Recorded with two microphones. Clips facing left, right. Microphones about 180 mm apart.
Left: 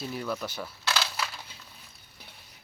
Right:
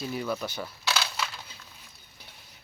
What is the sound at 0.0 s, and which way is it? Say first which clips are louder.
Speech: right 2 dB; centre (ahead or behind).